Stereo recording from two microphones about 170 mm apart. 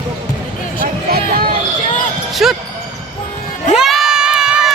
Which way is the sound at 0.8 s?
60° right (ahead or behind).